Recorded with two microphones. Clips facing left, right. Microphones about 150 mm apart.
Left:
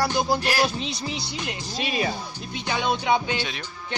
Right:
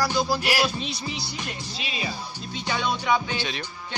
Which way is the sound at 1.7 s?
50° left (ahead or behind).